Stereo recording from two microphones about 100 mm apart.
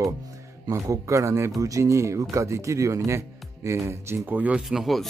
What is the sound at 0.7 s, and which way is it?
A man's voice, 35° right (ahead or behind).